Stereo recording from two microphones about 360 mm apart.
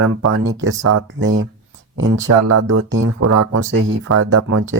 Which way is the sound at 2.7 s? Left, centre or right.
Right.